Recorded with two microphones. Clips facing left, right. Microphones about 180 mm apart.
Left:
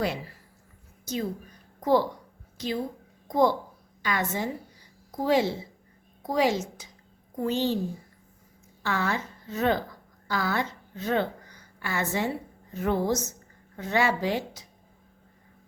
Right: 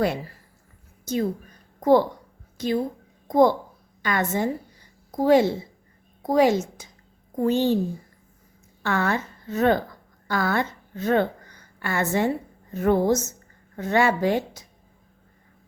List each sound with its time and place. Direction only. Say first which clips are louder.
1.8 s a child's voice: right 5 dB; 50° right (ahead or behind)
8.8 s a woman's voice: right 4 dB; 55° right (ahead or behind)